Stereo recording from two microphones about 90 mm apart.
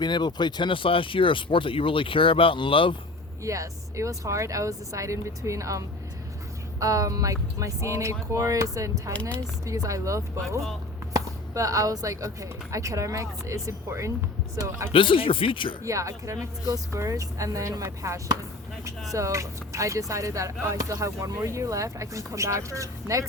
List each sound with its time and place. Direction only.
0.0 s speech: 55° left (ahead or behind); by 2.9 s 75° left (ahead or behind)
3.4 s speech: 35° right (ahead or behind)
14.9 s speech: 75° left (ahead or behind)
15.8 s speech: 35° right (ahead or behind)